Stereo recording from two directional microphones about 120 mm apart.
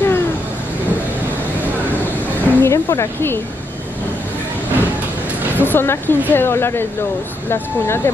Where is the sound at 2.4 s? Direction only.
20° left (ahead or behind).